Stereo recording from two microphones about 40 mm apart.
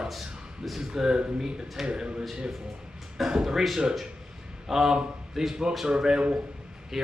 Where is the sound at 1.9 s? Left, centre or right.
Right.